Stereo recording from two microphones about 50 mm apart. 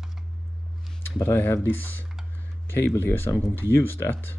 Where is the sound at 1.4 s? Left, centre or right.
Left.